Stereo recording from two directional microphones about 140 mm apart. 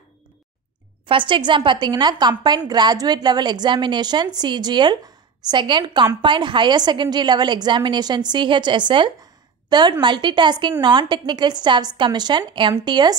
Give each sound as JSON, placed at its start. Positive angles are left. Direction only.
{"t": 1.0, "sound": "a woman's voice", "side_deg": -35}